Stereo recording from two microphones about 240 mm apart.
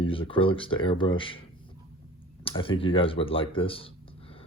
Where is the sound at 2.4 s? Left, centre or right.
Left.